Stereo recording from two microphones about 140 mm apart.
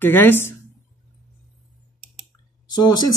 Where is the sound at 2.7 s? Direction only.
30° left (ahead or behind).